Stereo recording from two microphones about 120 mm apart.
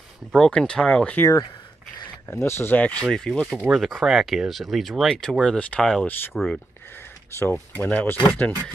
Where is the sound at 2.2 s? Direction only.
20° left (ahead or behind); by 6.6 s 5° left (ahead or behind).